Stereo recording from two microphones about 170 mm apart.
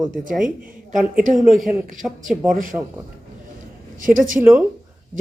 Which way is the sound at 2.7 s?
25° right (ahead or behind).